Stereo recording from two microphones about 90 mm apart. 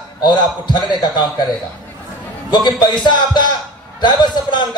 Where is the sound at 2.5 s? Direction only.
55° left (ahead or behind).